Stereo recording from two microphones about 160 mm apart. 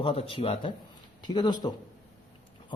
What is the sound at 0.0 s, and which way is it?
Speech, 35° left (ahead or behind).